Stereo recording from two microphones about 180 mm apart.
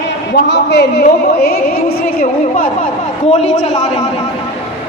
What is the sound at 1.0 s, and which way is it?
Music, 60° left (ahead or behind).